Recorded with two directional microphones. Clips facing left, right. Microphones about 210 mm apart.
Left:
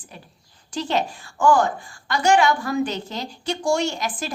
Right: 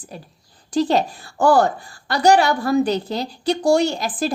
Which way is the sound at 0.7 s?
35° right (ahead or behind).